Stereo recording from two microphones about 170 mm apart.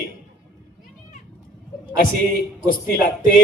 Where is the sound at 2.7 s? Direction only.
55° left (ahead or behind).